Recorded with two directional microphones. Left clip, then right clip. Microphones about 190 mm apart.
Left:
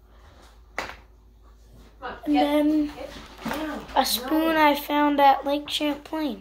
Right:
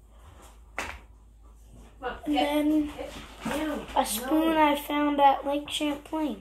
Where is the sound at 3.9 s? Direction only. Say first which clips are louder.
Left 4 dB; 20° left (ahead or behind).